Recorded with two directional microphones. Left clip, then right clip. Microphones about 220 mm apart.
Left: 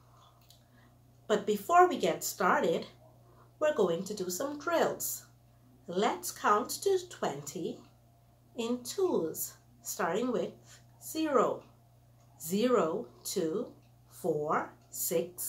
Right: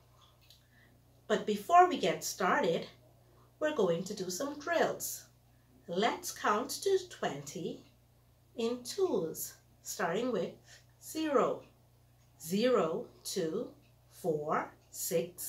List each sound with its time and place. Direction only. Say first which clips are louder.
1.2 s speech: left 3 dB; 20° left (ahead or behind)
8.5 s speech: even; 20° left (ahead or behind)
14.5 s speech: left 2 dB; 20° left (ahead or behind)